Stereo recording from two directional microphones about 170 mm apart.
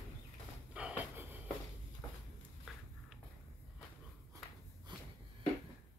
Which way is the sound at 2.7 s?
Centre (ahead or behind).